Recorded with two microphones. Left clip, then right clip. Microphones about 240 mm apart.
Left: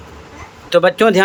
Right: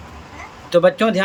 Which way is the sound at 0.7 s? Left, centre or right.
Centre.